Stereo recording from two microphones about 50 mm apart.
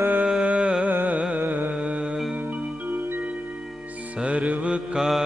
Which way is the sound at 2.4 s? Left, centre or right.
Right.